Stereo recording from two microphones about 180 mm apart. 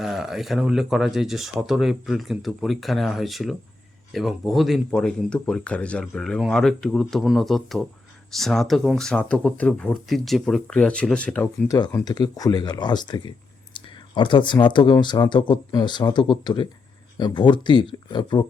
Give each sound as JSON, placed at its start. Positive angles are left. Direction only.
{"t": 0.0, "sound": "speech", "side_deg": 0}
{"t": 12.0, "sound": "speech", "side_deg": 20}